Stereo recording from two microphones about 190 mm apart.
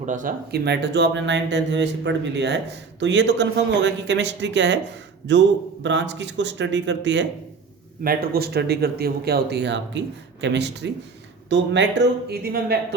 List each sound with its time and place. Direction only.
0.0 s speech: 40° right (ahead or behind)
0.5 s speech: 60° right (ahead or behind)
8.0 s speech: 50° right (ahead or behind)